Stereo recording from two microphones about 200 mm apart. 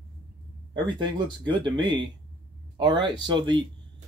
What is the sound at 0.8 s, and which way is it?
Speech, 25° right (ahead or behind).